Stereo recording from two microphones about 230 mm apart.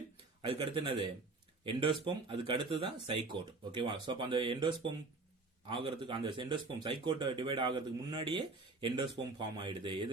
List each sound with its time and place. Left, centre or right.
0.4 s speech: right
9.4 s speech: centre